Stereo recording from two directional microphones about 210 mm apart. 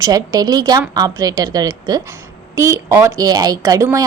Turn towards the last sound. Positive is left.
turn(degrees=-15)  # may be behind; listen again after turning